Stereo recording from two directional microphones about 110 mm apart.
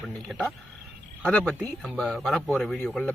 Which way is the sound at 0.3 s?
5° left (ahead or behind).